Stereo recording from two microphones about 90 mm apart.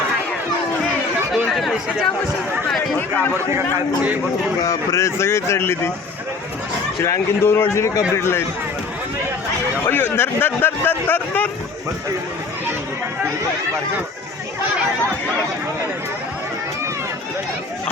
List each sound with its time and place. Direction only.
1.3 s chatter: centre (ahead or behind)
4.6 s speech: 35° left (ahead or behind)
7.0 s speech: 30° left (ahead or behind)
9.8 s speech: 25° left (ahead or behind)